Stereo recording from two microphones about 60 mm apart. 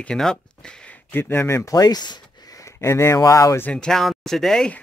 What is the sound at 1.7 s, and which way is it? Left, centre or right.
Speech, left.